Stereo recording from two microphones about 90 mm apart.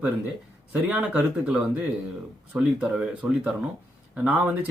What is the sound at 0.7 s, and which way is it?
Speech, 15° right (ahead or behind).